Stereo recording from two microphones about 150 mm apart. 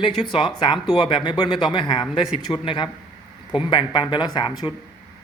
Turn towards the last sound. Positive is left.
turn(degrees=30)  # may be behind; listen again after turning